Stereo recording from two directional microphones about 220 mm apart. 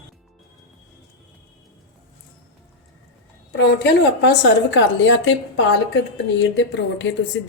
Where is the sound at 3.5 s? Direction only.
55° left (ahead or behind).